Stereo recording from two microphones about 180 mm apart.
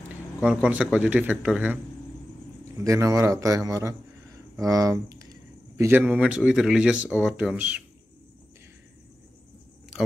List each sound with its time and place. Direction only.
0.4 s a man's voice: 5° right (ahead or behind)
2.8 s a man's voice: 15° right (ahead or behind)